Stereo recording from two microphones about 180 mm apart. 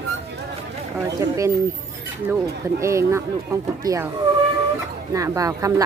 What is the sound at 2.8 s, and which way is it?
Speech, 15° right (ahead or behind).